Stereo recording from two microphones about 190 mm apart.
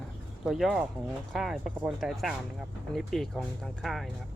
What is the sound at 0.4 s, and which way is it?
Speech, centre (ahead or behind).